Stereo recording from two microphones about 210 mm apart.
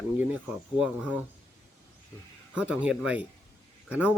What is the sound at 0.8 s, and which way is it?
Speech, 5° right (ahead or behind).